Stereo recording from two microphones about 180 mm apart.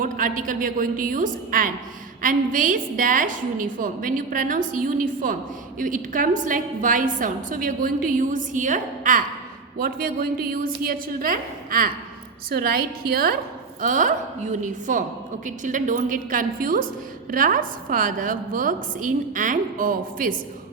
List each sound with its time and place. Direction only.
0.0 s a woman's voice: 50° right (ahead or behind)